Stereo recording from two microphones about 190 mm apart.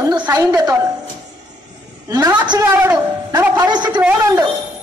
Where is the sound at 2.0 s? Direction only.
20° right (ahead or behind).